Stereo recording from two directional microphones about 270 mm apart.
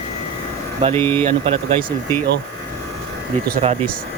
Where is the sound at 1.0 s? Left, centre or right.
Centre.